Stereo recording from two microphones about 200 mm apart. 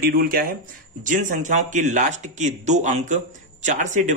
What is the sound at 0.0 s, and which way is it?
Speech, 50° right (ahead or behind).